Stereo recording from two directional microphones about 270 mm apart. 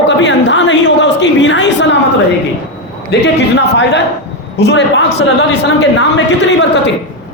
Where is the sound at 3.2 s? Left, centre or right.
Left.